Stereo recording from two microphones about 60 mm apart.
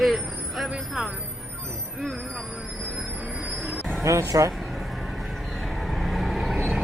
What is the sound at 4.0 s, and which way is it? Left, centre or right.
Speech, right.